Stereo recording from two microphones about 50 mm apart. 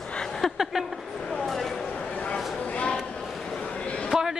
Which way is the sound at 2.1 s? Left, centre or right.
Left.